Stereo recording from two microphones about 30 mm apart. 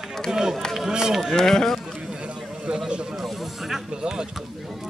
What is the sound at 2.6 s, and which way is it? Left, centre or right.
Speech, right.